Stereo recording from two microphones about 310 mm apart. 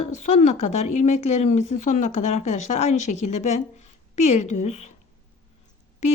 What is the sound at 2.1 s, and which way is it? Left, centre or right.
Speech, left.